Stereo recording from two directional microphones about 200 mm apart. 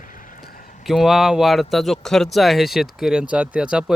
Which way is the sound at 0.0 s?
40° left (ahead or behind).